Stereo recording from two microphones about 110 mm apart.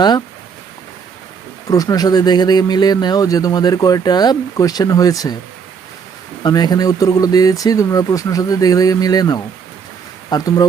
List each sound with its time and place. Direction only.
1.7 s speech: 35° left (ahead or behind)
6.4 s speech: 40° left (ahead or behind)